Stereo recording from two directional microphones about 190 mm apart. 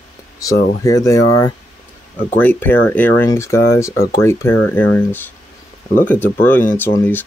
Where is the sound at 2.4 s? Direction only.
10° left (ahead or behind).